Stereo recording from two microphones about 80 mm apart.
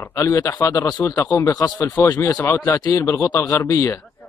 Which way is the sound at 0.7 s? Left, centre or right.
Left.